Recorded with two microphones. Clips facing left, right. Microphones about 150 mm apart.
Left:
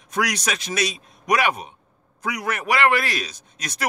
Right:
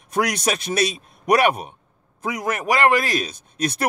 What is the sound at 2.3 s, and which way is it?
A man's voice, 40° right (ahead or behind).